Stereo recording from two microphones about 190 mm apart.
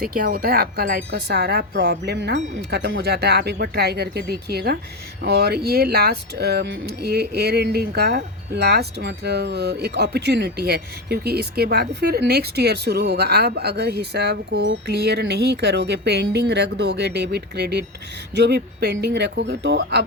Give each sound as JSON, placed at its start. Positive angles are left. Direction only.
{"t": 0.0, "sound": "speech", "side_deg": -50}